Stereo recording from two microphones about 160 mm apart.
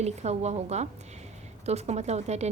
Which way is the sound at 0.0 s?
45° right (ahead or behind).